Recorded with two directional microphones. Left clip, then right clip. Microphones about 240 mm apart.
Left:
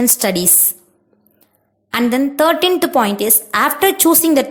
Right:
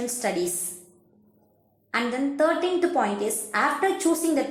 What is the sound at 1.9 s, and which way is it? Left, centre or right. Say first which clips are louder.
A woman's voice: left 9 dB; left.